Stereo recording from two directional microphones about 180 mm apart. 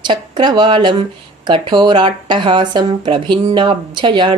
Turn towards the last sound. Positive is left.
turn(degrees=-25)  # may be behind; listen again after turning